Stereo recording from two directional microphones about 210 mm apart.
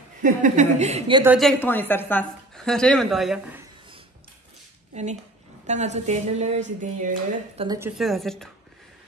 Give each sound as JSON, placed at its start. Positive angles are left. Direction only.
{"t": 0.2, "sound": "a woman's voice", "side_deg": -35}
{"t": 1.2, "sound": "a woman's voice", "side_deg": 0}
{"t": 5.7, "sound": "a woman's voice", "side_deg": -35}
{"t": 7.5, "sound": "a woman's voice", "side_deg": -20}
{"t": 8.0, "sound": "a woman's voice", "side_deg": 0}